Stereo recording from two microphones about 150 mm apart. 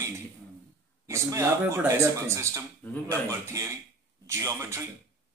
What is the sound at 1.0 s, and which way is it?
Speech, 20° right (ahead or behind).